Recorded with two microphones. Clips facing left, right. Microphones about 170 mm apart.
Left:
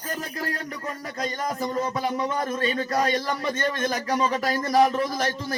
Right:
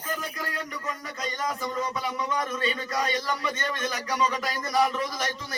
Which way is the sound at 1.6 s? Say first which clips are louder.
Left 4 dB; 40° left (ahead or behind).